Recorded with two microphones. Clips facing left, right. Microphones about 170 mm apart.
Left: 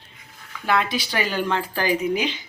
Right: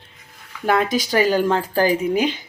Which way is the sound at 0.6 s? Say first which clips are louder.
Right 4 dB; 45° right (ahead or behind).